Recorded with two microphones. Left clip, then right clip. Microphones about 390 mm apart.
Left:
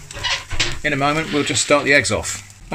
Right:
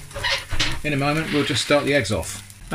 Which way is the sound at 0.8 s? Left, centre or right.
Centre.